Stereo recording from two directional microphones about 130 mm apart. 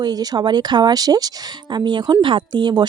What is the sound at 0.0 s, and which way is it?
Speech, 30° right (ahead or behind).